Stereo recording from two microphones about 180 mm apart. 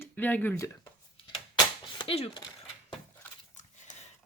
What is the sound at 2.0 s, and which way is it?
Speech, 30° left (ahead or behind).